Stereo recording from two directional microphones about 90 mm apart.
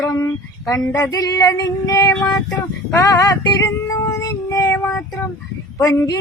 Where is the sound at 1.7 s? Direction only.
40° left (ahead or behind).